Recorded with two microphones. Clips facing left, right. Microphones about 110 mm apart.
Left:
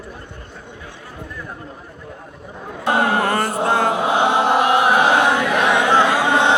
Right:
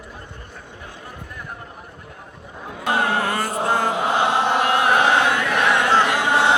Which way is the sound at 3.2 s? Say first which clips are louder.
Left 4 dB; 50° left (ahead or behind).